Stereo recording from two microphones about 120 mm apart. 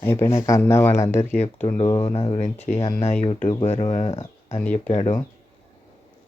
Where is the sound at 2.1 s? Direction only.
55° left (ahead or behind).